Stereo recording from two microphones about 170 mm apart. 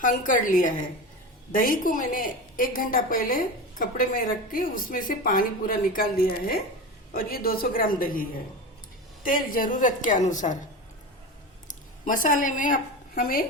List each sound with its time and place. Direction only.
0.3 s a woman's voice: 50° left (ahead or behind)
7.1 s a woman's voice: 60° left (ahead or behind)
11.7 s a woman's voice: 50° left (ahead or behind)